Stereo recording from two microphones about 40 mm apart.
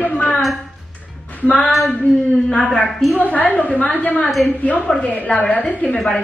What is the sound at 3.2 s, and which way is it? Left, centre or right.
A woman's voice, left.